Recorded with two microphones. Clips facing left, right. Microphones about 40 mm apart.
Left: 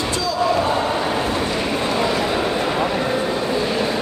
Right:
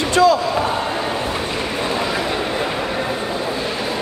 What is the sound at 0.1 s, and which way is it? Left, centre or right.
Slam, right.